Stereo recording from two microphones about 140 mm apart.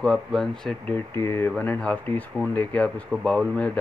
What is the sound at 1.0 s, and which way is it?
Speech, 15° left (ahead or behind).